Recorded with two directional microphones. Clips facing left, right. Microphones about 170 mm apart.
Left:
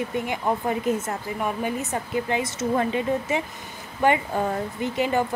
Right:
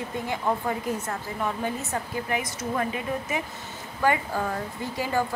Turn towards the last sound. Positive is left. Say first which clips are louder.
# left 4 dB
turn(degrees=20)  # may be behind; listen again after turning